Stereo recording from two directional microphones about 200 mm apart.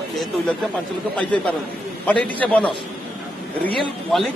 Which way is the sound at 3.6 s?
Centre (ahead or behind).